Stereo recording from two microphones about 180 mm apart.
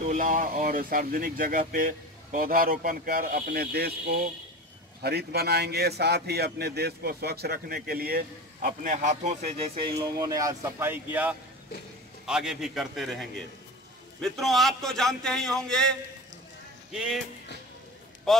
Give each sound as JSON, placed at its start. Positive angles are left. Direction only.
{"t": 0.0, "sound": "a man's voice", "side_deg": -45}
{"t": 16.9, "sound": "a man's voice", "side_deg": -5}